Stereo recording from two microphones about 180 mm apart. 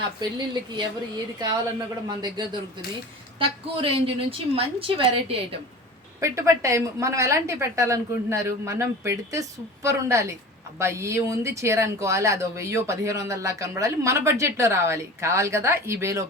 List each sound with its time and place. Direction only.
0.2 s a woman's voice: 25° right (ahead or behind)
6.1 s speech: 15° right (ahead or behind)